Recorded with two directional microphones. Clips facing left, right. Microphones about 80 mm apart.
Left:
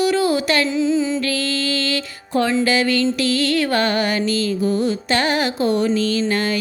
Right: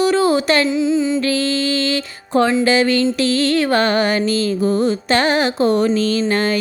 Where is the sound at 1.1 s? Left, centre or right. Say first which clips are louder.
Right 4 dB; right.